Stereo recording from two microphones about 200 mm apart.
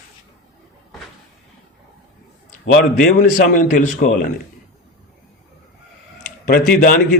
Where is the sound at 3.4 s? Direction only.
45° left (ahead or behind).